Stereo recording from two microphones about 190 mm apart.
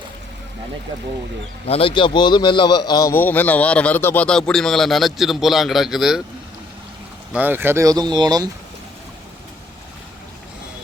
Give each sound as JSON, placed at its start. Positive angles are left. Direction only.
{"t": 1.6, "sound": "a man's voice", "side_deg": 30}
{"t": 7.3, "sound": "speech", "side_deg": -10}